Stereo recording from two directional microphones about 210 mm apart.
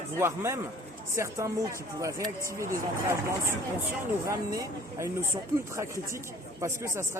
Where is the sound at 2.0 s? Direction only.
15° right (ahead or behind).